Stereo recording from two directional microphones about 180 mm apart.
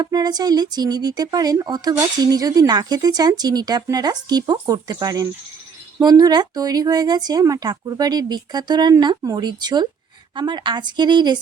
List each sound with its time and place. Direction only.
0.0 s speech: 20° right (ahead or behind)